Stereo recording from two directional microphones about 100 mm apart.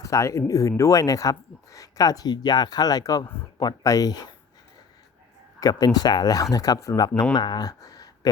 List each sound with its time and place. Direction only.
0.0 s speech: 30° left (ahead or behind)
5.5 s speech: 40° left (ahead or behind)